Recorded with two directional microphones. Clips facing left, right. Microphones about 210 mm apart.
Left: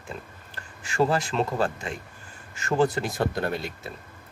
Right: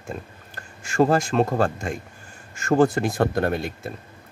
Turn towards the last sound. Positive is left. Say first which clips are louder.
# right 5 dB
turn(degrees=-50)  # may be behind; listen again after turning